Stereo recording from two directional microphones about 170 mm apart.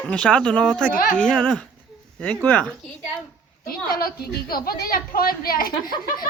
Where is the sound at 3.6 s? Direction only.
60° left (ahead or behind).